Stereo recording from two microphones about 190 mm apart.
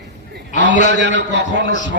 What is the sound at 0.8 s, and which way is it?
Speech, 70° right (ahead or behind).